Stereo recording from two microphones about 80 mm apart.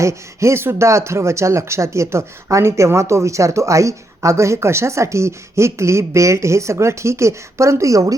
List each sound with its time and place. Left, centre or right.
0.0 s speech: right